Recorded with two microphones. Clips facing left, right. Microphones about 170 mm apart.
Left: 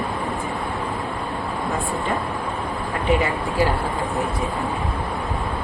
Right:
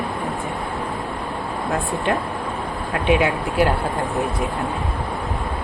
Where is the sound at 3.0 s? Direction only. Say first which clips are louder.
Right 2 dB; 80° right.